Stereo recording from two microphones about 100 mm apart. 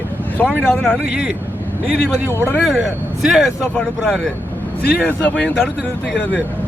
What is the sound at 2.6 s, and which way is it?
Speech, centre (ahead or behind).